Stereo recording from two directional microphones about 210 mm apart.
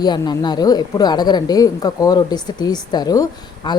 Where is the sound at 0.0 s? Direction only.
20° left (ahead or behind).